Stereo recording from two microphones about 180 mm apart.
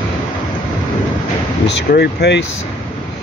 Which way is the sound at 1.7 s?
70° left (ahead or behind).